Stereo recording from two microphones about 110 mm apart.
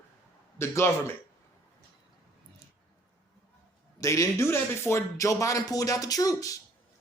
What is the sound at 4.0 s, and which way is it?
A man's voice, 30° left (ahead or behind).